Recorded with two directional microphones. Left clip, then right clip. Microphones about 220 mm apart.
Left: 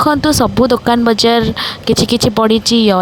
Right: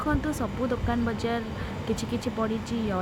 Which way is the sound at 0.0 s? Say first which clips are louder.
Left 17 dB; 40° left (ahead or behind).